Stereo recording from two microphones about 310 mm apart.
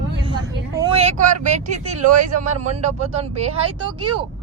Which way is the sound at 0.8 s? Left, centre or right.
Centre.